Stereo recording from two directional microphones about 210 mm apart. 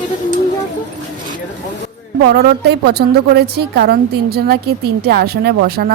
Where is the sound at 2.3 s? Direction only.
50° right (ahead or behind).